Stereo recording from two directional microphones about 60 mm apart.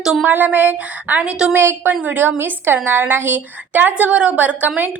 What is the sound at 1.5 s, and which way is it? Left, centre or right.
Speech, right.